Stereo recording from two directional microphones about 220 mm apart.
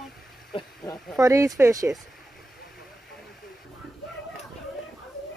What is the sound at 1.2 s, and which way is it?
Speech, 15° right (ahead or behind).